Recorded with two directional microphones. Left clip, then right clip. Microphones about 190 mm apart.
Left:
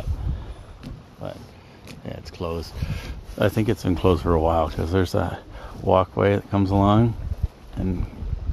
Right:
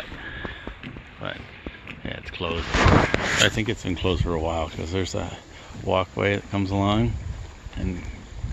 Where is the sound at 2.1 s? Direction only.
25° left (ahead or behind).